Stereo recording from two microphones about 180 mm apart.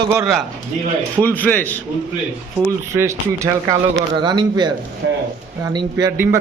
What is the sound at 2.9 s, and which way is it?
A man's voice, 15° right (ahead or behind).